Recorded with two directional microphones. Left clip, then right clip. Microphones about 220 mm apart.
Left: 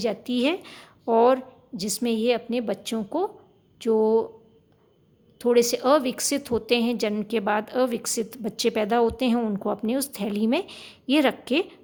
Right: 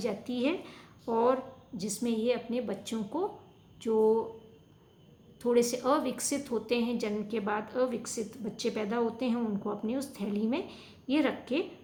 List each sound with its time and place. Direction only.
0.0 s a woman's voice: 45° left (ahead or behind)
5.4 s a woman's voice: 40° left (ahead or behind)